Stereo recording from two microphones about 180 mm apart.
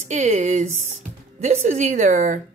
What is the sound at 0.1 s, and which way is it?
Speech, 40° right (ahead or behind).